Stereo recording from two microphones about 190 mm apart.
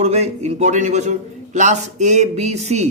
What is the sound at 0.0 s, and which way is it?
A man's voice, 35° right (ahead or behind).